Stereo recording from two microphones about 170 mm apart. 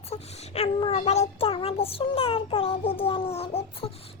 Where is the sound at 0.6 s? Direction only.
35° left (ahead or behind).